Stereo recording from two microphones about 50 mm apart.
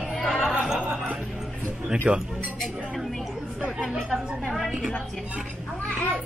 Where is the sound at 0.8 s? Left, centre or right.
Right.